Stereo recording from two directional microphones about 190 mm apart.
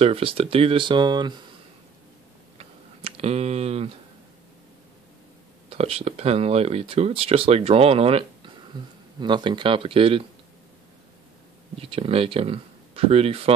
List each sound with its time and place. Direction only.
0.0 s speech: 30° right (ahead or behind)
2.5 s tick: 30° right (ahead or behind)
5.7 s speech: 30° right (ahead or behind)
11.8 s speech: 30° right (ahead or behind)